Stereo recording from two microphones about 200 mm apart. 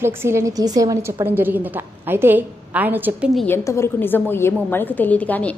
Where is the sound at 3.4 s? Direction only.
10° left (ahead or behind).